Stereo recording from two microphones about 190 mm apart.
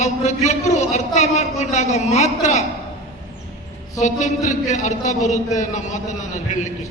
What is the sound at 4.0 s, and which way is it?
A man's voice, 40° left (ahead or behind).